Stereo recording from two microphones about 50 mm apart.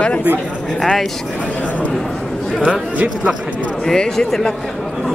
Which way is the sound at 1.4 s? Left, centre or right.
Left.